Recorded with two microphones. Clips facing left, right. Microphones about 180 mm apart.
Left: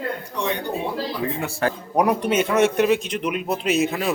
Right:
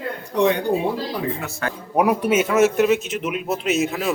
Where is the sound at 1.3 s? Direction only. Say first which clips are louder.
Left 4 dB; 30° left (ahead or behind).